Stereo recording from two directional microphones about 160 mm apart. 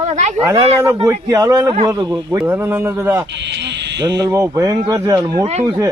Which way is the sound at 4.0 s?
25° right (ahead or behind).